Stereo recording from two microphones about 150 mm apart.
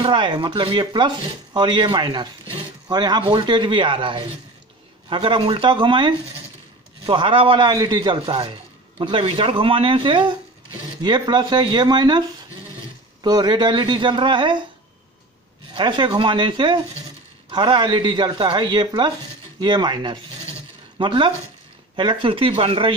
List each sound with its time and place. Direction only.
0.0 s a man's voice: 35° right (ahead or behind)
15.7 s a man's voice: 30° right (ahead or behind)